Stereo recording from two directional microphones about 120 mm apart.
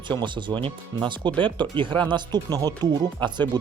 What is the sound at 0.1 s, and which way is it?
Speech, 40° right (ahead or behind).